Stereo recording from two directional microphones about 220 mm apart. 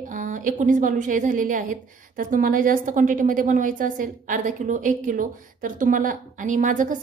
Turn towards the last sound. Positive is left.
turn(degrees=-35)  # may be behind; listen again after turning